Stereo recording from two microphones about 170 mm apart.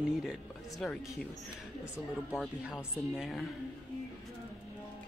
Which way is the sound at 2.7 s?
5° right (ahead or behind).